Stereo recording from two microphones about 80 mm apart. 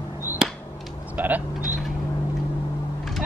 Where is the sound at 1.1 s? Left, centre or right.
Right.